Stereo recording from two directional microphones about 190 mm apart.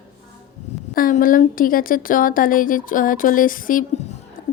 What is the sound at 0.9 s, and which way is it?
A woman's voice, 45° left (ahead or behind).